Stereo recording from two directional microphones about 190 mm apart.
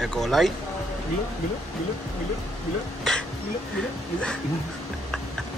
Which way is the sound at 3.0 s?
5° left (ahead or behind).